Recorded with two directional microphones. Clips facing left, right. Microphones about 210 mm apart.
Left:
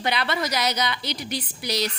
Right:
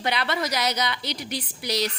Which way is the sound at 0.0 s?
35° right (ahead or behind).